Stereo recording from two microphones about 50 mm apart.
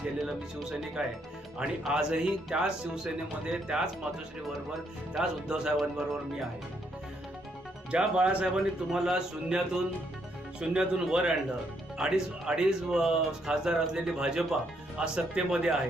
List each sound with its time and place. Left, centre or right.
0.3 s speech: centre
5.1 s speech: centre
7.9 s speech: centre
8.5 s speech: centre